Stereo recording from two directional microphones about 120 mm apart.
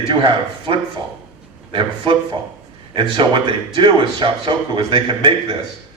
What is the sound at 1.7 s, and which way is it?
Speech, 45° right (ahead or behind).